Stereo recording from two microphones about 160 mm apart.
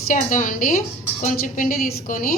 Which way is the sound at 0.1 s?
55° left (ahead or behind).